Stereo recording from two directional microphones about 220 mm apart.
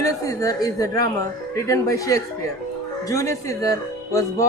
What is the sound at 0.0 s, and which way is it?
Speech, 15° left (ahead or behind).